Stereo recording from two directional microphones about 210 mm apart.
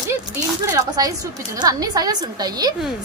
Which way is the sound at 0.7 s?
15° right (ahead or behind).